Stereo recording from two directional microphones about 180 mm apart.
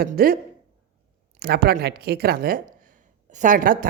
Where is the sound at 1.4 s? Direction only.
60° right (ahead or behind).